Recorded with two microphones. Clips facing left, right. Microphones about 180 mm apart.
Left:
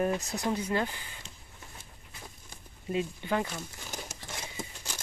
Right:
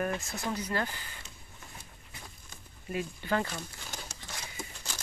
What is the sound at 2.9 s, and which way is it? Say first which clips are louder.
Speech: left 2 dB; 20° left (ahead or behind).